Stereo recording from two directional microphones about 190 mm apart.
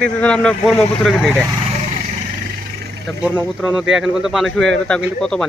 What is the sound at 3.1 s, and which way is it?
Speech, centre (ahead or behind).